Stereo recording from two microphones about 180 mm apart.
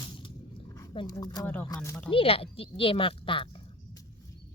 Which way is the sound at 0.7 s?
25° left (ahead or behind).